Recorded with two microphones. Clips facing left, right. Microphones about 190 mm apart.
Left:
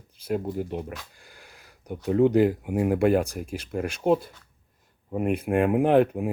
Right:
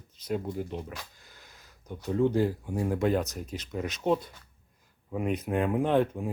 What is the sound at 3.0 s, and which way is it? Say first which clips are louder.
Speech: left 5 dB; 10° left (ahead or behind).